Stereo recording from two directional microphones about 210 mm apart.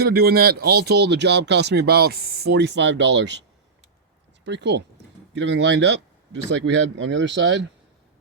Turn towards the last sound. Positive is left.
turn(degrees=-60)  # may be behind; listen again after turning